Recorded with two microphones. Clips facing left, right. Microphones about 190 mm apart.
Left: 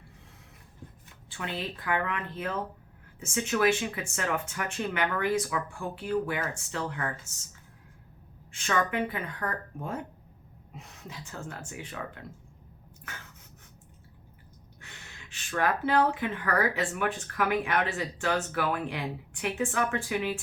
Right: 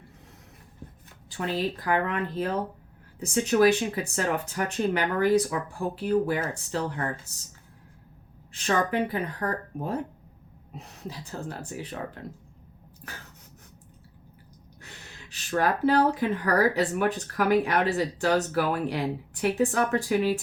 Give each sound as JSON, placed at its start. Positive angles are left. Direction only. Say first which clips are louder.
{"t": 1.3, "sound": "speech", "louder": "right 7 dB", "side_deg": -35}
{"t": 8.5, "sound": "speech", "louder": "right 3 dB", "side_deg": -35}
{"t": 13.1, "sound": "a sound", "louder": "right 2 dB", "side_deg": -35}
{"t": 14.8, "sound": "speech", "louder": "right 3 dB", "side_deg": -40}